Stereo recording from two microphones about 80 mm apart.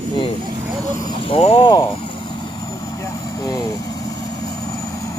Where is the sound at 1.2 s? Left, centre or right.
Left.